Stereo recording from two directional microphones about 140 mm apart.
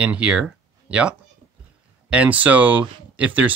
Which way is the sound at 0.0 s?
10° right (ahead or behind).